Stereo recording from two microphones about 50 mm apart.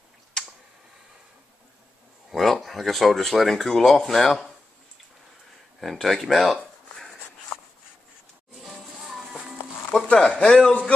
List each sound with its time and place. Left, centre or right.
2.3 s speech: centre
5.8 s speech: centre
8.6 s music: centre
9.8 s speech: left
10.1 s speech: centre